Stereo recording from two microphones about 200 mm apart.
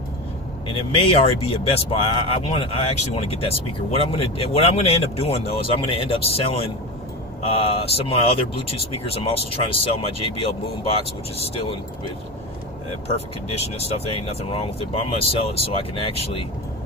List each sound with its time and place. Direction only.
0.7 s speech: 30° left (ahead or behind)
11.3 s speech: 30° left (ahead or behind)
13.1 s speech: 30° left (ahead or behind)